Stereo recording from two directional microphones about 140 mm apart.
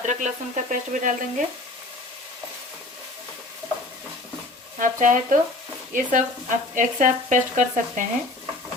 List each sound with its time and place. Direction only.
0.0 s frying: 60° right (ahead or behind)
4.8 s speech: 70° right (ahead or behind)
5.9 s frying: 65° right (ahead or behind)